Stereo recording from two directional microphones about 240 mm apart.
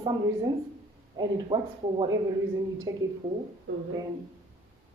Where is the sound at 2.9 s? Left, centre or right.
Centre.